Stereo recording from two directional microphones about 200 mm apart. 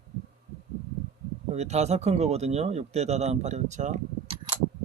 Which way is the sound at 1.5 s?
35° right (ahead or behind).